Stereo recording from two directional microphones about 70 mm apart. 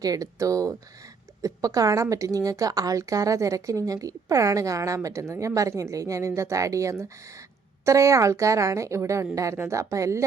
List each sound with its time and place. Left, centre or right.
0.0 s a woman's voice: right